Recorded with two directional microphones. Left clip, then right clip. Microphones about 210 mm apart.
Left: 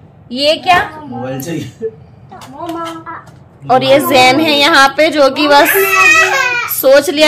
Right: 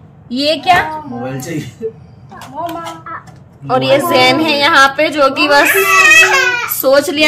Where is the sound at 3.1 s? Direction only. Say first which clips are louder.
Even; 5° left (ahead or behind).